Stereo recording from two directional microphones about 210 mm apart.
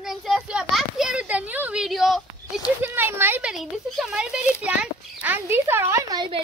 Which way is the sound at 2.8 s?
10° right (ahead or behind).